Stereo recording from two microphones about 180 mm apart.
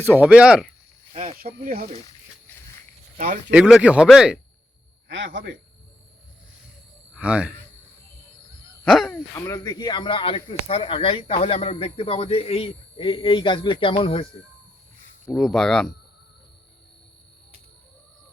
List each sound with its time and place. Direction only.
0.0 s speech: 10° right (ahead or behind)
1.1 s speech: 40° right (ahead or behind)
1.4 s speech: 55° right (ahead or behind)
3.5 s a man's voice: 5° right (ahead or behind)
5.0 s a man's voice: 90° right
7.2 s speech: 5° right (ahead or behind)
8.9 s speech: centre (ahead or behind)
9.3 s speech: 20° left (ahead or behind)
15.3 s a man's voice: centre (ahead or behind)